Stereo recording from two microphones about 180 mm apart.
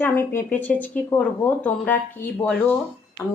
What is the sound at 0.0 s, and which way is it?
Speech, 10° left (ahead or behind).